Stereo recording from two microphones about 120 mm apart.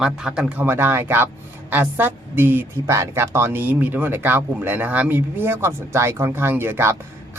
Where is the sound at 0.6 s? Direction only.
20° right (ahead or behind).